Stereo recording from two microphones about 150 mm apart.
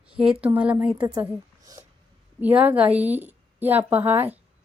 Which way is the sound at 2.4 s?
10° right (ahead or behind).